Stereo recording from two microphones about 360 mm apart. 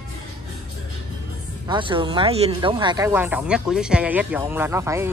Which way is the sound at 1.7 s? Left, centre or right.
Centre.